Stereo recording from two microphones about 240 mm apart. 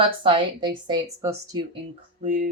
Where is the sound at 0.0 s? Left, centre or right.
Right.